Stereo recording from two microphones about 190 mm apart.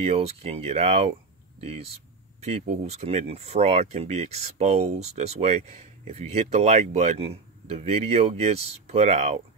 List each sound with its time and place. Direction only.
0.0 s speech: 35° right (ahead or behind)